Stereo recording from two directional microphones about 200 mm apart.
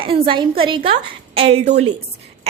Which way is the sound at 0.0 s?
25° right (ahead or behind).